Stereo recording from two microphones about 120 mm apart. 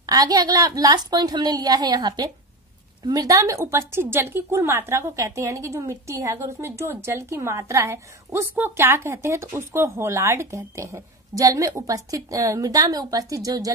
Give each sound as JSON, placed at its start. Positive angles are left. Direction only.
{"t": 0.0, "sound": "a woman's voice", "side_deg": -30}